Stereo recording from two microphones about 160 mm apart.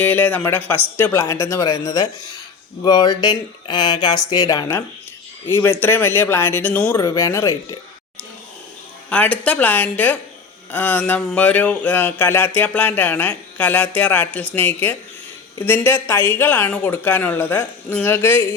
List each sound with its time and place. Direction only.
0.0 s speech: 10° left (ahead or behind)
9.0 s speech: 10° left (ahead or behind)